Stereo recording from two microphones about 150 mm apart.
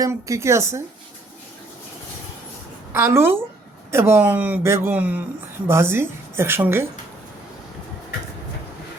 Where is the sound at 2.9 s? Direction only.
15° right (ahead or behind).